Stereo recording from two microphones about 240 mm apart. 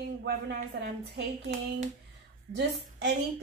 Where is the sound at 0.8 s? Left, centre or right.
Right.